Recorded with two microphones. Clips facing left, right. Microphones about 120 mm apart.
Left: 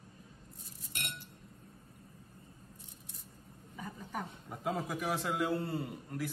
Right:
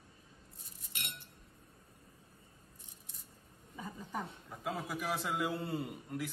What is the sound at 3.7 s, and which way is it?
Speech, 20° right (ahead or behind).